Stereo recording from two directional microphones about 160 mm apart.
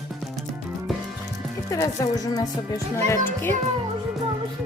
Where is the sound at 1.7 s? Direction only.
20° left (ahead or behind).